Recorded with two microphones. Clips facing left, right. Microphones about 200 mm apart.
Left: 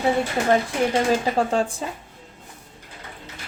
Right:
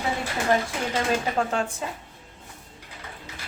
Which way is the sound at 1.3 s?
30° left (ahead or behind).